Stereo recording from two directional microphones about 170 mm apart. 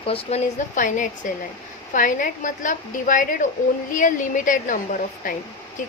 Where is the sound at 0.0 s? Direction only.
35° left (ahead or behind).